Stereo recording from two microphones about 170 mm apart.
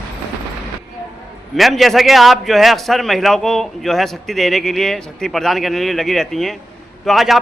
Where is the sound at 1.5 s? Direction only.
Centre (ahead or behind).